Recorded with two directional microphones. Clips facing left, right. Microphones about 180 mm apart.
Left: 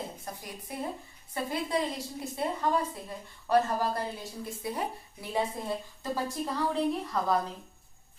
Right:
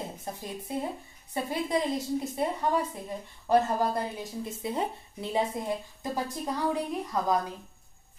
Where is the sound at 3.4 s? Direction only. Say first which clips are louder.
Right 2 dB; 20° right (ahead or behind).